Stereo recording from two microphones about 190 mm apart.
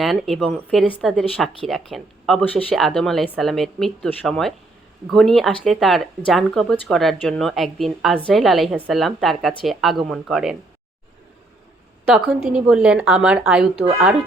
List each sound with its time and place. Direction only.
0.0 s speech: centre (ahead or behind)
12.1 s speech: 5° right (ahead or behind)